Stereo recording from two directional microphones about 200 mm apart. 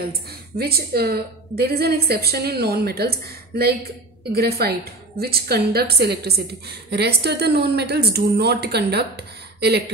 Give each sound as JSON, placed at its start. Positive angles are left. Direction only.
{"t": 0.6, "sound": "a woman's voice", "side_deg": -50}